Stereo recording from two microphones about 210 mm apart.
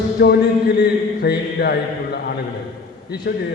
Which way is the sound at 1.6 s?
45° left (ahead or behind).